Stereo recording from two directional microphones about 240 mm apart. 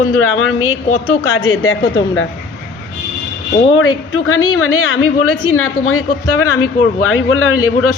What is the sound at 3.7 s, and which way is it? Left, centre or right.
Speech, left.